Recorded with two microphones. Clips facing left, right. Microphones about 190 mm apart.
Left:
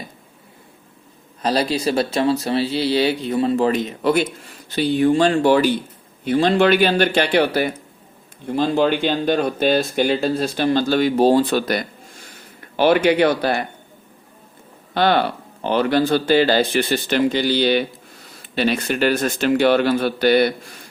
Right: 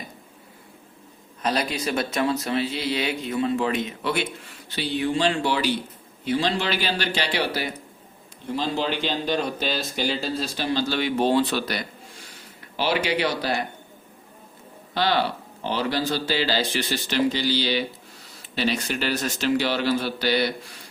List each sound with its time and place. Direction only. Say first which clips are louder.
1.4 s speech: left 6 dB; 35° left (ahead or behind); by 13.7 s 55° left (ahead or behind)
14.9 s speech: left 5 dB; 55° left (ahead or behind)